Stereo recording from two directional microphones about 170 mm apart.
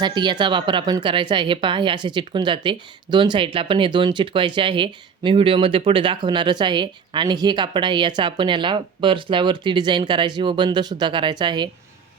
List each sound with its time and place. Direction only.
0.0 s speech: 25° right (ahead or behind)